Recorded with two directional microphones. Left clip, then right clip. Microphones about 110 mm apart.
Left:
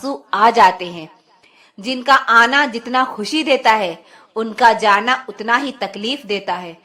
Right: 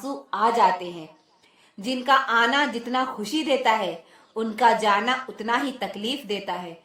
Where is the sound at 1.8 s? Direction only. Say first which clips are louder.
Left 7 dB; 20° left (ahead or behind).